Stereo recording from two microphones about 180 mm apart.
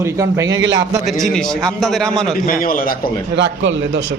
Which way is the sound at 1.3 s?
5° left (ahead or behind).